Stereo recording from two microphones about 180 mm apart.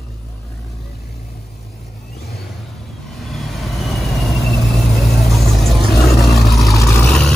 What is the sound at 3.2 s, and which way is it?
Vehicle, centre (ahead or behind).